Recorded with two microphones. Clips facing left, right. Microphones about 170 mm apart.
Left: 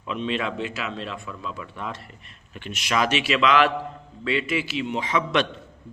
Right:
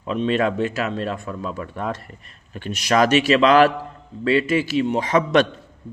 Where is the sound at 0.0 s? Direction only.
40° right (ahead or behind).